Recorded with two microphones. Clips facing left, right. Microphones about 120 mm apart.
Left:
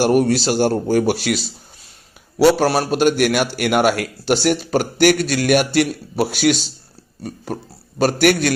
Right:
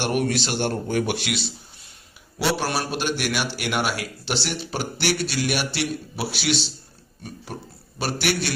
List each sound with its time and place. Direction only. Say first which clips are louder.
0.0 s a man's voice: left 8 dB; 40° left (ahead or behind)
7.9 s a man's voice: left 10 dB; 45° left (ahead or behind)